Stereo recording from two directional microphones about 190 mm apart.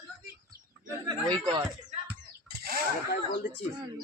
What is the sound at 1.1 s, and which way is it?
Speech, 25° right (ahead or behind).